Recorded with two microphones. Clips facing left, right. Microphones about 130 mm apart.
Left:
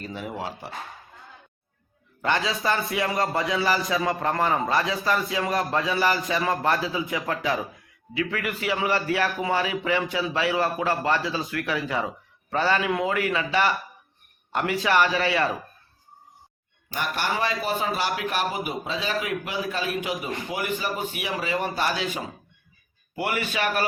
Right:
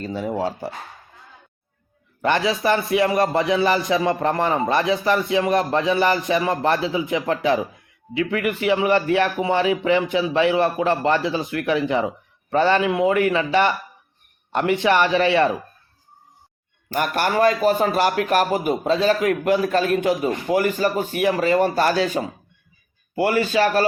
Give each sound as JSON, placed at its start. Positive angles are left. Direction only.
{"t": 0.0, "sound": "speech", "side_deg": -35}
{"t": 2.2, "sound": "a man's voice", "side_deg": -20}
{"t": 16.9, "sound": "a man's voice", "side_deg": -55}